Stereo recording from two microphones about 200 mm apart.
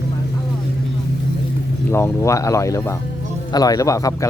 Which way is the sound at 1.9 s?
15° left (ahead or behind).